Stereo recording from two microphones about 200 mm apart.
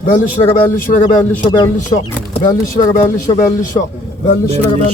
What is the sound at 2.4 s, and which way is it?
Speech, 25° left (ahead or behind).